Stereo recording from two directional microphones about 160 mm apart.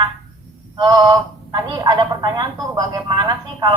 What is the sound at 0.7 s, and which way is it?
Telephone, 25° right (ahead or behind).